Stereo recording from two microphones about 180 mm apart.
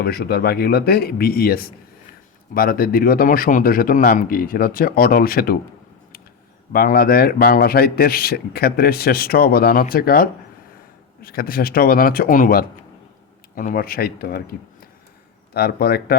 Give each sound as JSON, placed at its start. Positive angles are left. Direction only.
{"t": 0.0, "sound": "a man's voice", "side_deg": 60}
{"t": 6.7, "sound": "a man's voice", "side_deg": 55}